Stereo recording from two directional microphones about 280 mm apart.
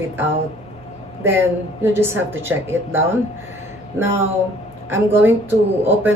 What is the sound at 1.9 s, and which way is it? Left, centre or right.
Speech, centre.